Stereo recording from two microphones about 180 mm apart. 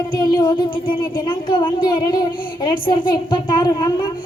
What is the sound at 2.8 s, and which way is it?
A child's voice, 25° left (ahead or behind).